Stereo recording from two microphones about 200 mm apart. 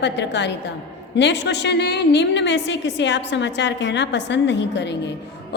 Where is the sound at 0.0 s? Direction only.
60° left (ahead or behind).